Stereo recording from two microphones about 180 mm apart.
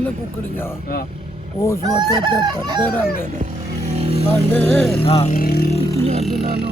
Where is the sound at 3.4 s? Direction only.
40° right (ahead or behind).